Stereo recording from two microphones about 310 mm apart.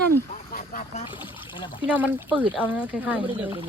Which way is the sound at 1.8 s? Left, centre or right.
Centre.